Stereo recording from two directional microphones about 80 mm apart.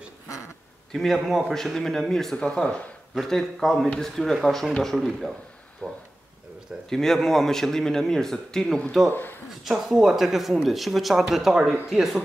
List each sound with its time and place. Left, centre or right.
0.9 s speech: centre
3.2 s speech: centre
5.8 s speech: centre
9.1 s a man's voice: left
9.5 s speech: centre